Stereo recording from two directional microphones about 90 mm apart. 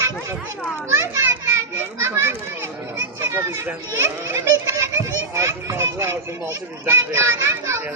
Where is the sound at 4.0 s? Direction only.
30° right (ahead or behind).